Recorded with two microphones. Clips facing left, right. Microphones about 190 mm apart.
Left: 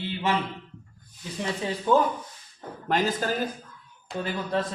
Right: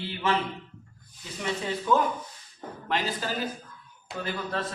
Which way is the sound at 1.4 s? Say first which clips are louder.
Left 1 dB; 30° left (ahead or behind).